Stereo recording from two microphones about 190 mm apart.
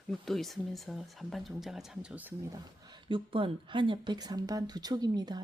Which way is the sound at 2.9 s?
25° right (ahead or behind).